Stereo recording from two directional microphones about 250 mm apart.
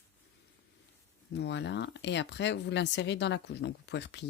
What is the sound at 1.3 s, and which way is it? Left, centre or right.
Speech, left.